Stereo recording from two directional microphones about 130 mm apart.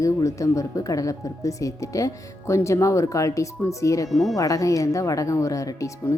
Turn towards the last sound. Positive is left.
turn(degrees=25)  # may be behind; listen again after turning